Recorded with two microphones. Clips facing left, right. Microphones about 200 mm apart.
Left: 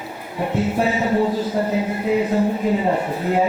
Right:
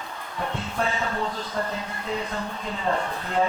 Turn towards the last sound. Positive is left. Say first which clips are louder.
# left 6 dB
turn(degrees=10)  # may be behind; listen again after turning